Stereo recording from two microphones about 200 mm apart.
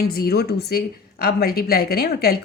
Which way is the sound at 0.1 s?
50° left (ahead or behind).